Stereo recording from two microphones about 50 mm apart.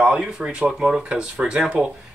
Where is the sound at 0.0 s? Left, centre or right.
Centre.